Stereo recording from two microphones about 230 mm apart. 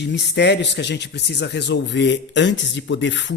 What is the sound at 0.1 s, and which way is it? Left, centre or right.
Speech, left.